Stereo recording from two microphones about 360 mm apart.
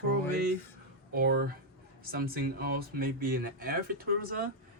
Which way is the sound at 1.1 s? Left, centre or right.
Right.